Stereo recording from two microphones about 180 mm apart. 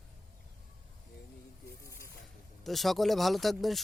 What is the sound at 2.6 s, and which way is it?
Speech, centre (ahead or behind).